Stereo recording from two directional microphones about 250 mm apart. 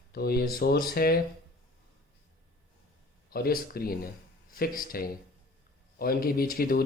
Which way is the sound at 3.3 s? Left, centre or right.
Left.